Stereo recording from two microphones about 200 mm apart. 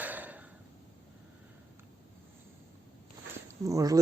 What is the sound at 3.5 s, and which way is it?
Speech, 15° right (ahead or behind).